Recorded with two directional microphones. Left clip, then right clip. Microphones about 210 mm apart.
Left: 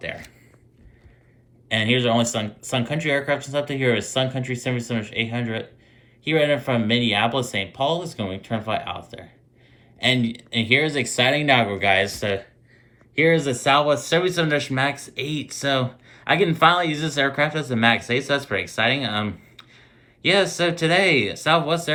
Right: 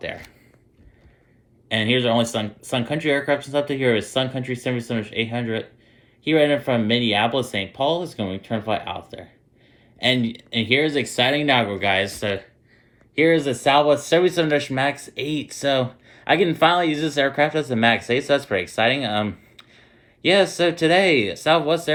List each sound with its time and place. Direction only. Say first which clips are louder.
1.7 s speech: even; 15° right (ahead or behind)
10.0 s speech: even; 20° right (ahead or behind)
13.1 s speech: right 1 dB; 15° right (ahead or behind)